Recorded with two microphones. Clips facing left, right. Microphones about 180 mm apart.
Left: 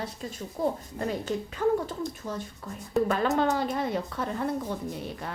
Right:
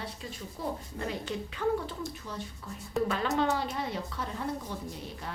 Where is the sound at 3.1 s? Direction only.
50° left (ahead or behind).